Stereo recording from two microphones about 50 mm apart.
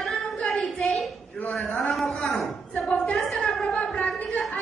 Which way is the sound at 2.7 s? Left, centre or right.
Left.